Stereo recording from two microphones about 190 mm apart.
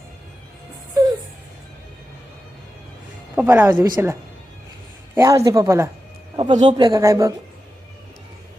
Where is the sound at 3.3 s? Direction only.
10° right (ahead or behind).